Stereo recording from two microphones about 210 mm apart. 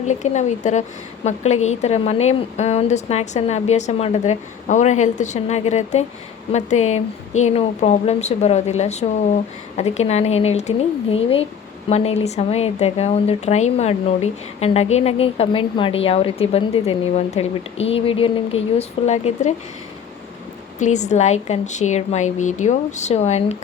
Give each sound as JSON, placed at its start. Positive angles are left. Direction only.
{"t": 0.0, "sound": "a woman's voice", "side_deg": 35}
{"t": 20.7, "sound": "a woman's voice", "side_deg": 35}